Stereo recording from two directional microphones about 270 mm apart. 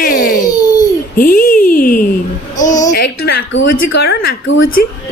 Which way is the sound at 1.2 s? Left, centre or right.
Left.